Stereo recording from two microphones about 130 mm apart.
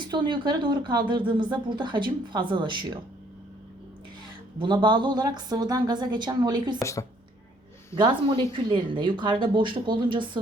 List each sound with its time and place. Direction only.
0.0 s speech: 35° right (ahead or behind)
4.5 s speech: 40° right (ahead or behind)
7.9 s speech: 40° right (ahead or behind)